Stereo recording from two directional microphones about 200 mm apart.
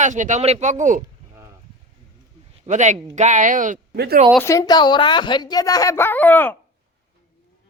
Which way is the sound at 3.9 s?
55° right (ahead or behind).